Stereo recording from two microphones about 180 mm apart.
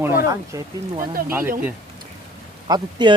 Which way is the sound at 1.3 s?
10° right (ahead or behind).